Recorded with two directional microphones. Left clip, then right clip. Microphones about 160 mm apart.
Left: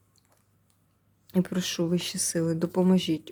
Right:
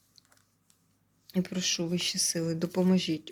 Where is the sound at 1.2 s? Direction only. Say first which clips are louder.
Left 2 dB; 35° left (ahead or behind).